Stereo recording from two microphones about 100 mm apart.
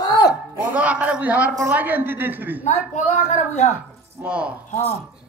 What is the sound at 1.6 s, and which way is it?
A woman's voice, 20° right (ahead or behind).